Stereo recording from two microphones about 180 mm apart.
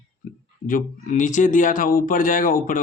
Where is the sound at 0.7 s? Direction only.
45° left (ahead or behind).